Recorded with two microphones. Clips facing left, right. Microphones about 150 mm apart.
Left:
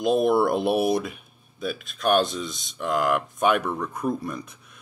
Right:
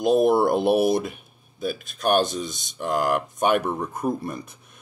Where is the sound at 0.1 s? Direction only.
40° right (ahead or behind).